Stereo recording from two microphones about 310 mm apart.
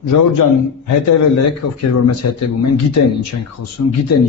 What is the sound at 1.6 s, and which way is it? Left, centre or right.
Speech, left.